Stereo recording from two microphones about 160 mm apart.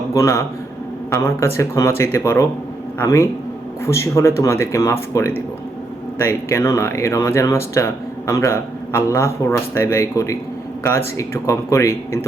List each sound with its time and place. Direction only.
0.1 s speech: 20° left (ahead or behind)